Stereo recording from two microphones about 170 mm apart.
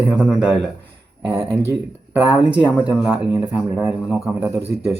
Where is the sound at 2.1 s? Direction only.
10° right (ahead or behind).